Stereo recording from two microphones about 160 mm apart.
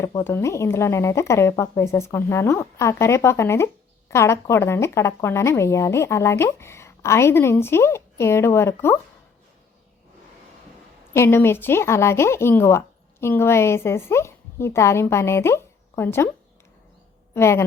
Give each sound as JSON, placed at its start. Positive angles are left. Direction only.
{"t": 0.0, "sound": "speech", "side_deg": 15}
{"t": 11.1, "sound": "speech", "side_deg": 15}
{"t": 17.3, "sound": "speech", "side_deg": 15}